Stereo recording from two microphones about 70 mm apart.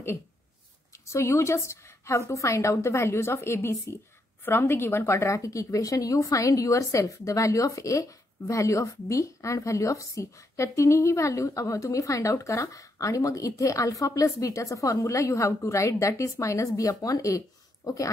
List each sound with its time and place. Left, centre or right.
1.0 s a woman's voice: left